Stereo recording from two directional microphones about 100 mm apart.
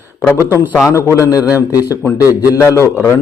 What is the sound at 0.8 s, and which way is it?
A man's voice, 30° left (ahead or behind).